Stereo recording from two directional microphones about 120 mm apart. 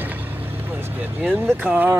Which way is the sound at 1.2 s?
15° right (ahead or behind).